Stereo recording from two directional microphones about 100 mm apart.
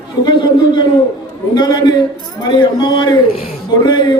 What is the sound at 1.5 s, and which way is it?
A man's voice, 45° left (ahead or behind).